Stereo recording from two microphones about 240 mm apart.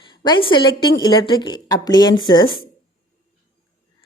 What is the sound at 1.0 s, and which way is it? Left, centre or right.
Speech, centre.